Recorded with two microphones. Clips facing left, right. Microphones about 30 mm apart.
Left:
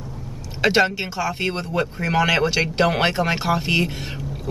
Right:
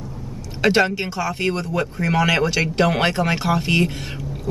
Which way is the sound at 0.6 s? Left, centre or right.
Centre.